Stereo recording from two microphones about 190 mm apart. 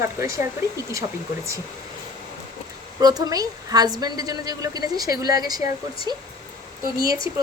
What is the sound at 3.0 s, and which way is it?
A woman's voice, 20° right (ahead or behind).